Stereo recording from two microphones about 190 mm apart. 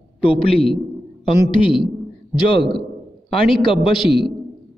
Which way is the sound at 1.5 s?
25° left (ahead or behind).